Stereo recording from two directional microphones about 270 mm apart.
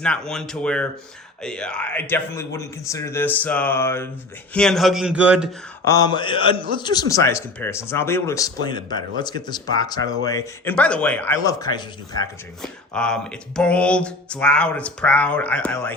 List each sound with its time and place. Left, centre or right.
0.0 s speech: centre
5.8 s speech: centre
12.6 s speech: centre